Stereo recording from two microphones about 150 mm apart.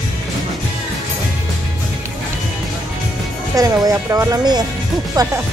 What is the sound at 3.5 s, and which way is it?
Speech, 25° right (ahead or behind).